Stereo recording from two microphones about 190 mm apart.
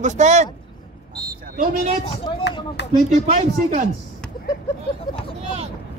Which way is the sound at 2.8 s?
65° left (ahead or behind).